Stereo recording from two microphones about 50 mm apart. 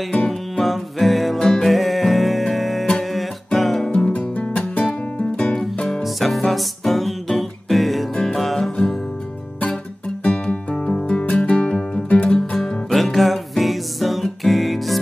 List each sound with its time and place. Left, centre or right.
0.3 s music: centre
3.8 s music: centre
4.1 s music: left
6.0 s music: centre
10.2 s music: left
12.5 s music: centre